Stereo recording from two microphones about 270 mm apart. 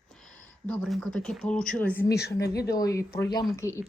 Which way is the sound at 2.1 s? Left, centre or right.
Left.